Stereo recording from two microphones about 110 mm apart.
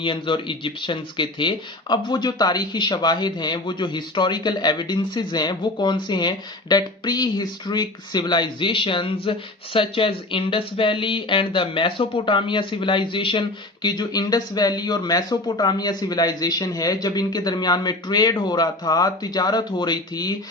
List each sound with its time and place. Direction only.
0.0 s speech: 50° left (ahead or behind)